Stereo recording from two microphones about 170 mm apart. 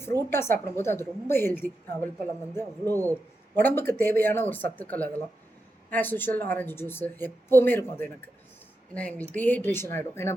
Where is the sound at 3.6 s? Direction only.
10° left (ahead or behind).